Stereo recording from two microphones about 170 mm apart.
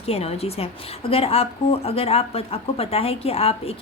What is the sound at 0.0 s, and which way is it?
A woman's voice, 35° left (ahead or behind).